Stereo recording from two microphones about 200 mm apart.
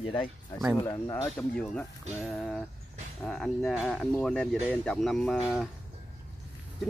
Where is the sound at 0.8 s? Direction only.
15° left (ahead or behind).